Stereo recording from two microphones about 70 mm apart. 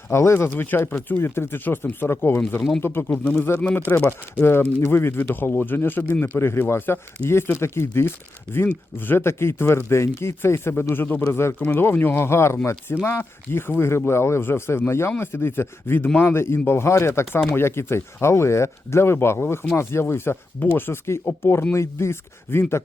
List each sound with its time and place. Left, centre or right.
0.1 s speech: left
0.3 s speech: left
3.1 s speech: left